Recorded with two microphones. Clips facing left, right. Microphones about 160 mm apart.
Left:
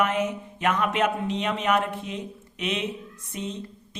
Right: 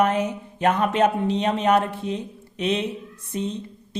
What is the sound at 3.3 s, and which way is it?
Music, 35° right (ahead or behind).